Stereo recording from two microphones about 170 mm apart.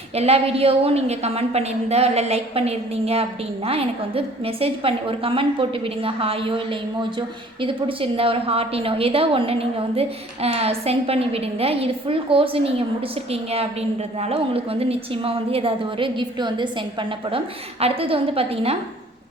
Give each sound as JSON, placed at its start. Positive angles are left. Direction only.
{"t": 0.2, "sound": "a woman's voice", "side_deg": -35}